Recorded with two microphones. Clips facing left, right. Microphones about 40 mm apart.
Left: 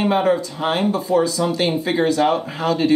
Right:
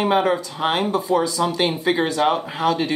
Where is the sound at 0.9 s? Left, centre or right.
Right.